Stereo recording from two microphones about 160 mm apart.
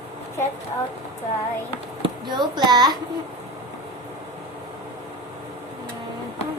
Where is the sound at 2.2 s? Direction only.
30° right (ahead or behind).